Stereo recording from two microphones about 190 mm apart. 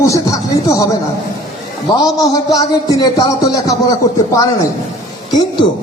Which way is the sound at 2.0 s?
20° left (ahead or behind).